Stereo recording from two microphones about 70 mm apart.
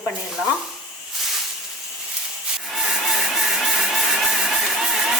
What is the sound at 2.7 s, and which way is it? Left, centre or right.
Vehicle, centre.